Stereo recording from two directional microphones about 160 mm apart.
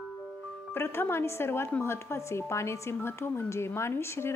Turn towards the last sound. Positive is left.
turn(degrees=15)  # may be behind; listen again after turning